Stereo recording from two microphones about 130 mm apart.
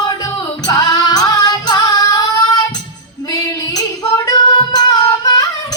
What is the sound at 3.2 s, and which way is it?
Female singing, 30° left (ahead or behind).